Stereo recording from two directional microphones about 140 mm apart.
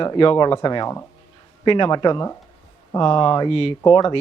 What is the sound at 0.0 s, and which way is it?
Speech, 35° left (ahead or behind).